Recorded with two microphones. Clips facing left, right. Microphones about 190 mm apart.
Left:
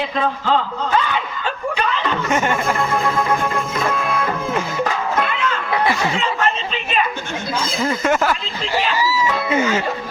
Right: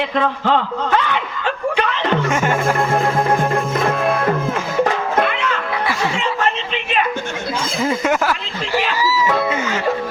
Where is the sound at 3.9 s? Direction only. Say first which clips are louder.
Right 3 dB; 50° right (ahead or behind).